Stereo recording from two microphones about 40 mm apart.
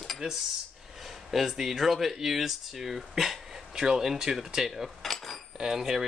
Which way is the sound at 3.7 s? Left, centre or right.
Centre.